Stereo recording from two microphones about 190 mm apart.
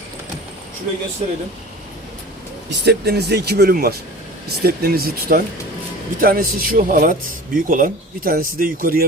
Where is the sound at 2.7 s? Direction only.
60° right (ahead or behind).